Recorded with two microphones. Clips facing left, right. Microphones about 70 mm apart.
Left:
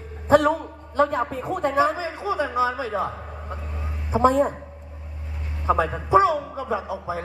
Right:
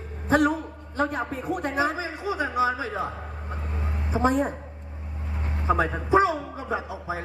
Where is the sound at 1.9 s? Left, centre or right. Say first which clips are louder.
Left 3 dB; right.